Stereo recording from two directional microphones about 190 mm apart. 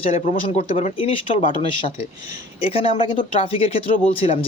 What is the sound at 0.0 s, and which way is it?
Speech, 35° left (ahead or behind).